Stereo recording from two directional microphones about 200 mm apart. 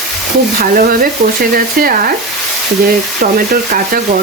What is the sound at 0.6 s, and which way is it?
Stir, 45° right (ahead or behind).